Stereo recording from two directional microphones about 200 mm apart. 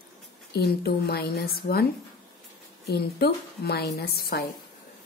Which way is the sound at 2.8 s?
55° left (ahead or behind).